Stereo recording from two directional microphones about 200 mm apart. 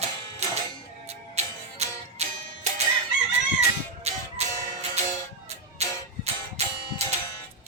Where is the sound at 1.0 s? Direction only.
35° right (ahead or behind).